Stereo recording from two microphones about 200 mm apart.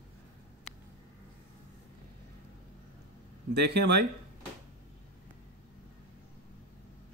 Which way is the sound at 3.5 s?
55° right (ahead or behind).